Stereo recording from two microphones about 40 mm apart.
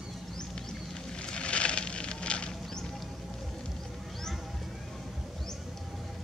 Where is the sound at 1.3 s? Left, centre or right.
Left.